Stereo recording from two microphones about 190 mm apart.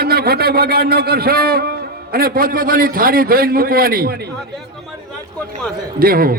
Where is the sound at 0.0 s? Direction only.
55° right (ahead or behind).